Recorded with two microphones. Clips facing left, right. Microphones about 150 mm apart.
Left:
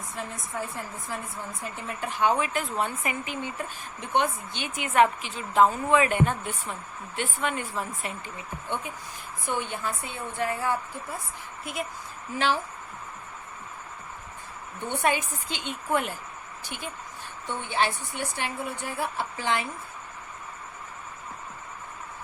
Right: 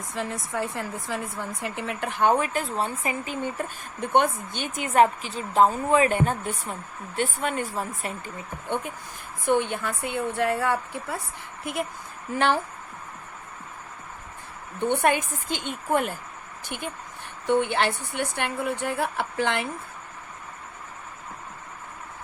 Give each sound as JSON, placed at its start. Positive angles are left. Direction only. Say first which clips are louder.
{"t": 0.1, "sound": "a woman's voice", "louder": "right 6 dB", "side_deg": -90}
{"t": 3.4, "sound": "a woman's voice", "louder": "right 4 dB", "side_deg": -50}
{"t": 11.6, "sound": "a woman's voice", "louder": "right 4 dB", "side_deg": -55}
{"t": 14.8, "sound": "a woman's voice", "louder": "right 4 dB", "side_deg": -60}
{"t": 17.4, "sound": "a woman's voice", "louder": "right 6 dB", "side_deg": -65}